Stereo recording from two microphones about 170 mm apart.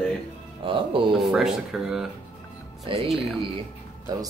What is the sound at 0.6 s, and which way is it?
Speech, 30° right (ahead or behind).